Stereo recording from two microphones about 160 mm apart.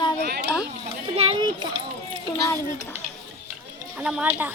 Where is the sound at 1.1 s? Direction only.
35° right (ahead or behind).